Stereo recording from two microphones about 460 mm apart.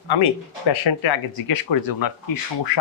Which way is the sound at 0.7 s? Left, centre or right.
Left.